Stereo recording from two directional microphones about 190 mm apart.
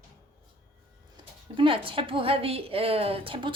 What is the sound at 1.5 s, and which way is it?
A woman's voice, 25° right (ahead or behind).